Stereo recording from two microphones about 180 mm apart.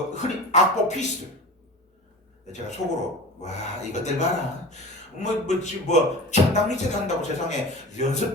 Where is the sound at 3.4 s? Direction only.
40° left (ahead or behind).